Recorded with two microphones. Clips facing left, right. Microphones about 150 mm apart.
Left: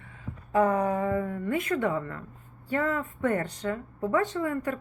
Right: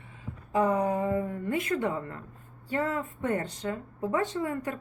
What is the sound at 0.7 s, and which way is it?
Speech, 20° right (ahead or behind).